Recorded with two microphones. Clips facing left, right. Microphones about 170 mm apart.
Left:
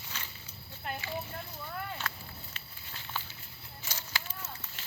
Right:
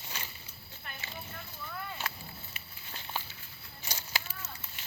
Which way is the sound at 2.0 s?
5° right (ahead or behind).